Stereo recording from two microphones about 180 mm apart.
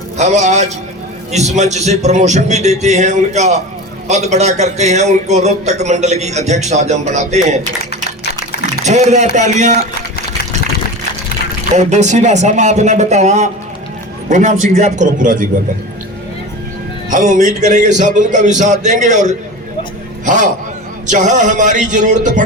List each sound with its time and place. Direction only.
0.2 s a man's voice: 40° right (ahead or behind)
7.9 s typing: 65° left (ahead or behind)
8.8 s a man's voice: 40° right (ahead or behind)
11.8 s a man's voice: 40° right (ahead or behind)
17.1 s a man's voice: 45° right (ahead or behind)